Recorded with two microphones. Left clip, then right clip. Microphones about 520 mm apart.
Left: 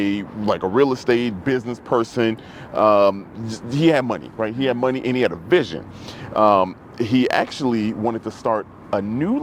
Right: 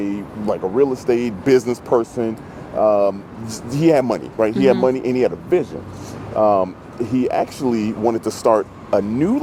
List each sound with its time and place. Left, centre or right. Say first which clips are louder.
0.0 s speech: left 1 dB; centre
1.0 s speech: right 2 dB; centre
2.2 s speech: left 2 dB; left; by 9.4 s centre